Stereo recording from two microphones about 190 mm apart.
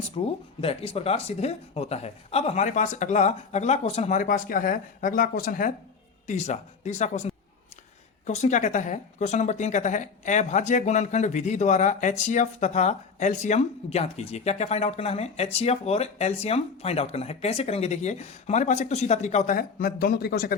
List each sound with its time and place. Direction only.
0.3 s speech: 30° left (ahead or behind); by 20.6 s 55° left (ahead or behind)